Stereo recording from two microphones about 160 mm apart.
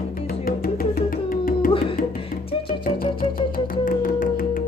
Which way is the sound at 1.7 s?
35° left (ahead or behind).